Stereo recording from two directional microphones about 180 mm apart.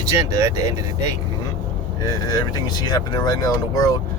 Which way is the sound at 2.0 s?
20° left (ahead or behind).